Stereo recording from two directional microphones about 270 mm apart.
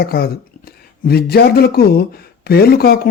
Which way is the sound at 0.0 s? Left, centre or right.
Left.